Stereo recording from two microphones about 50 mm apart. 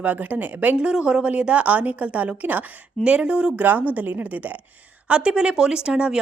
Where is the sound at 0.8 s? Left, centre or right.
Centre.